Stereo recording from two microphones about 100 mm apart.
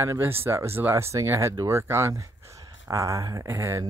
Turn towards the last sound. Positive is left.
turn(degrees=-30)  # may be behind; listen again after turning